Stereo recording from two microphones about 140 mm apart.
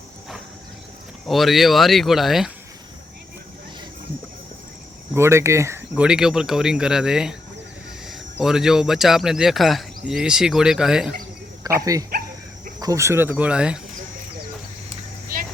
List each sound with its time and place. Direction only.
1.3 s speech: centre (ahead or behind)
5.1 s speech: 20° right (ahead or behind)
5.9 s speech: 5° right (ahead or behind)
11.6 s speech: 25° right (ahead or behind)
12.8 s speech: 20° right (ahead or behind)